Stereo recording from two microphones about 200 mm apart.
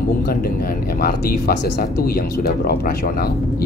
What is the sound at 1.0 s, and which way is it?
Speech, 50° left (ahead or behind).